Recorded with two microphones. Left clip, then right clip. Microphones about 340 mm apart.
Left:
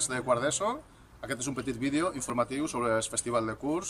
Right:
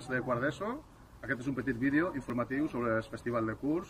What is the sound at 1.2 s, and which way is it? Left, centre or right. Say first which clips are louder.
Speech: left 1 dB; left.